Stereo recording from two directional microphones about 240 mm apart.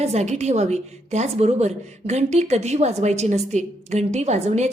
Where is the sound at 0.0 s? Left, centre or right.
Right.